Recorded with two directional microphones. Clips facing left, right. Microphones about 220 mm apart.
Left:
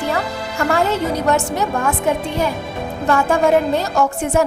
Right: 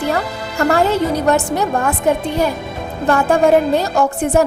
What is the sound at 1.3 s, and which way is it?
Speech, 35° right (ahead or behind).